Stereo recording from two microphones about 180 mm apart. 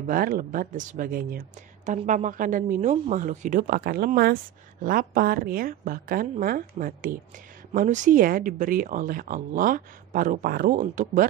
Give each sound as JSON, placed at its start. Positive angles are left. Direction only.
{"t": 0.0, "sound": "speech", "side_deg": -50}